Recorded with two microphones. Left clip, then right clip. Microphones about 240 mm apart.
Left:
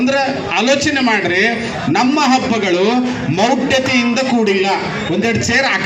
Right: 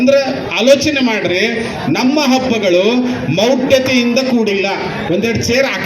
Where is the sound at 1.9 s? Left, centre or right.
Left.